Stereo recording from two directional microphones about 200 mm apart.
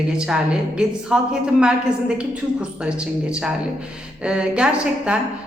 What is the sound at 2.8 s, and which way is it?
A woman's voice, 5° right (ahead or behind).